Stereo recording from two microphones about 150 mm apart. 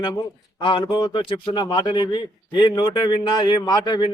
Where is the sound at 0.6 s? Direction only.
30° left (ahead or behind).